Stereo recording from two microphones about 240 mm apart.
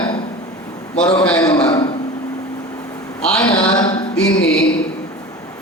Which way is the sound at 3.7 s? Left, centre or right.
Centre.